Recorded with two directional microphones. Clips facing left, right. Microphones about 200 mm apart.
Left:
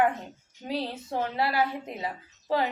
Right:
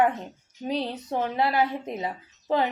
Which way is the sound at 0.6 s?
20° right (ahead or behind).